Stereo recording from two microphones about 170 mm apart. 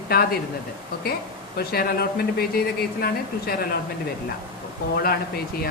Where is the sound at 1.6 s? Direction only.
65° left (ahead or behind).